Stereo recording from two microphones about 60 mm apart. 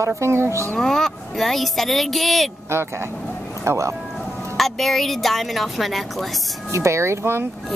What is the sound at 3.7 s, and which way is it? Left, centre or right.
Speech, right.